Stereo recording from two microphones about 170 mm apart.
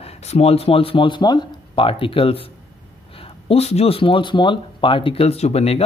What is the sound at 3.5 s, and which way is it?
Speech, 35° left (ahead or behind).